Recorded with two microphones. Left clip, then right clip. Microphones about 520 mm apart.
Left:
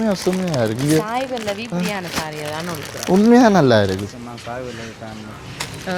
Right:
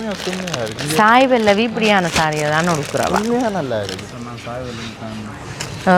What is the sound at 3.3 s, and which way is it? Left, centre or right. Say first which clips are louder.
Speech: left 7 dB; left.